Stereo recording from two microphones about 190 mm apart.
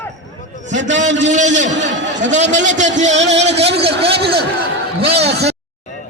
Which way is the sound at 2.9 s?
40° right (ahead or behind).